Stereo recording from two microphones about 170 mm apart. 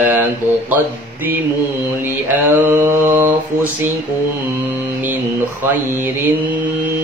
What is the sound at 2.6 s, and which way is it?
Mantra, 10° right (ahead or behind).